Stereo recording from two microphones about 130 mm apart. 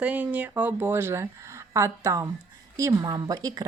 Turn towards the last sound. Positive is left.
turn(degrees=-30)  # may be behind; listen again after turning